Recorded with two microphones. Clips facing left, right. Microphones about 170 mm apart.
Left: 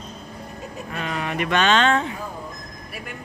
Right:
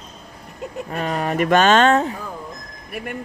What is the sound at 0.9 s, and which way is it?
Speech, 40° right (ahead or behind).